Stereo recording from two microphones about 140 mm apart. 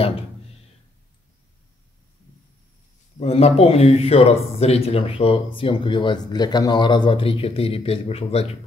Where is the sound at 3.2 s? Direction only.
45° left (ahead or behind).